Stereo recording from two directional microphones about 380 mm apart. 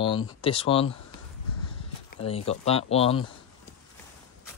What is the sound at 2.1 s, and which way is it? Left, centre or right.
Speech, centre.